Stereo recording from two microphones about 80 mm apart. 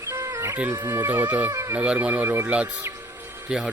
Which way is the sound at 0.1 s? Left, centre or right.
Right.